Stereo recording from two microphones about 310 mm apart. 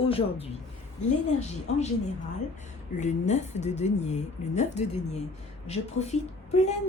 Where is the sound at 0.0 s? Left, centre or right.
Centre.